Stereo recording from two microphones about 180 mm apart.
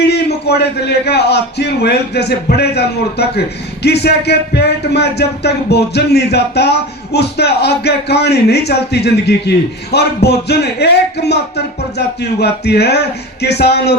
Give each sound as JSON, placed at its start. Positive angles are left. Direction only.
{"t": 0.0, "sound": "a man's voice", "side_deg": 65}